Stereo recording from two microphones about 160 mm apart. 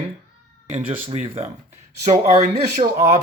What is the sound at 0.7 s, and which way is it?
Speech, 40° right (ahead or behind).